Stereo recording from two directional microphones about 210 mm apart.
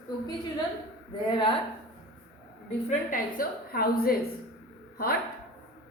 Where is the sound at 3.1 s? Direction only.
45° left (ahead or behind).